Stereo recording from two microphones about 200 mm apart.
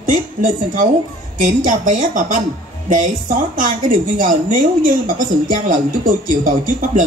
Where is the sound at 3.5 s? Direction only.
40° right (ahead or behind).